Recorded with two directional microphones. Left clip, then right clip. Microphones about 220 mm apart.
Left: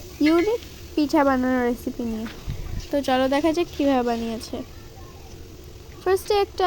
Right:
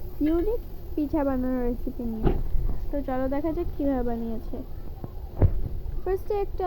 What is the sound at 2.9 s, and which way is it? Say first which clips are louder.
Speech: left 8 dB; 70° left (ahead or behind).